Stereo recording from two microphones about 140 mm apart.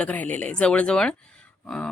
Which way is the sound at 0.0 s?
10° left (ahead or behind).